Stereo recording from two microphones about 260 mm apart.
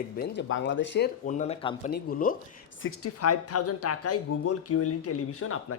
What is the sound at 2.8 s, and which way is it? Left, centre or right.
Speech, left.